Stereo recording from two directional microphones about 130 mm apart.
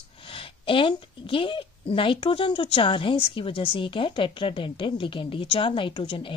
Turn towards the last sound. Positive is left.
turn(degrees=45)  # may be behind; listen again after turning